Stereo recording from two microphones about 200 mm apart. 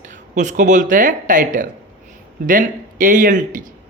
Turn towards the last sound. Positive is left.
turn(degrees=-40)  # may be behind; listen again after turning